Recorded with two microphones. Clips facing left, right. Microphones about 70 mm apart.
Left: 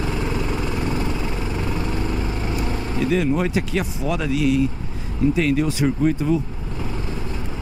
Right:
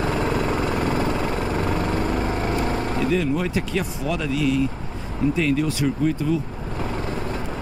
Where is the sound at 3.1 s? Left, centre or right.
Centre.